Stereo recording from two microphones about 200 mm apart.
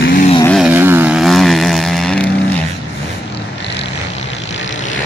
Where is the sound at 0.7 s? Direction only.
10° right (ahead or behind).